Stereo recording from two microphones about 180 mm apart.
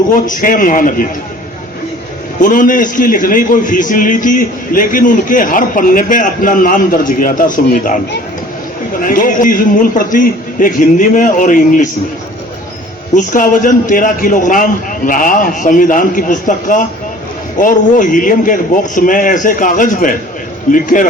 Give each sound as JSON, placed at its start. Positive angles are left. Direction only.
{"t": 0.1, "sound": "a man's voice", "side_deg": 50}
{"t": 2.4, "sound": "a man's voice", "side_deg": 50}
{"t": 9.0, "sound": "a man's voice", "side_deg": 50}
{"t": 13.1, "sound": "a man's voice", "side_deg": 45}